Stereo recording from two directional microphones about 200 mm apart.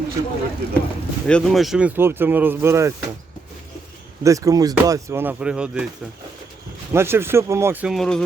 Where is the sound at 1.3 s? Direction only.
5° left (ahead or behind); by 2.9 s 15° right (ahead or behind).